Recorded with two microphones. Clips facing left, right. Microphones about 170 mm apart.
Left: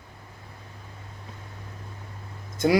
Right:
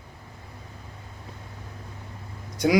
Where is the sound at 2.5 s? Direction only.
15° right (ahead or behind).